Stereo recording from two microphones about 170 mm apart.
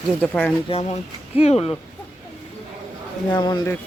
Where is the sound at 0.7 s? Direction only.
40° left (ahead or behind).